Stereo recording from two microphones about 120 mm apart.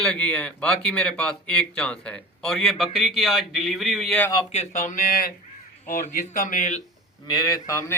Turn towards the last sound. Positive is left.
turn(degrees=25)  # may be behind; listen again after turning